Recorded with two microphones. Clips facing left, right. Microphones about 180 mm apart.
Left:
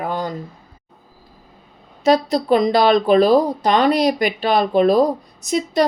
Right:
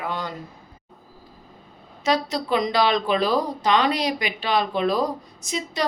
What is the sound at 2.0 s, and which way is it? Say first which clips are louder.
A woman's voice: left 7 dB; 40° left (ahead or behind).